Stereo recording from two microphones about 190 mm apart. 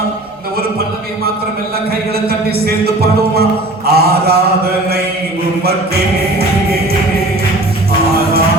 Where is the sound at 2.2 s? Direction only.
55° right (ahead or behind).